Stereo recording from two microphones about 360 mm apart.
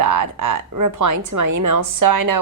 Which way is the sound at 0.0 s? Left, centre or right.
Right.